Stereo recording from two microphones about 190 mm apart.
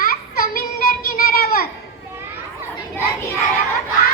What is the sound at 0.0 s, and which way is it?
Child singing, 50° left (ahead or behind).